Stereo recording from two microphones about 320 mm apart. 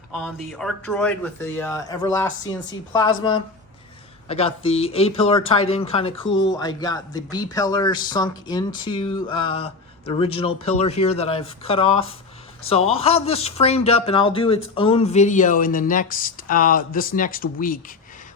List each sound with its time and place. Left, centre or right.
0.1 s a man's voice: centre; by 17.9 s left